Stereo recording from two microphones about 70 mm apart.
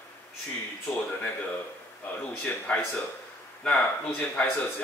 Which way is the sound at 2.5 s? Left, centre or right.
Left.